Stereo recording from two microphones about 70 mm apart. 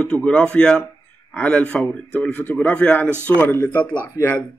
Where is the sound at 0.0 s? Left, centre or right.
Centre.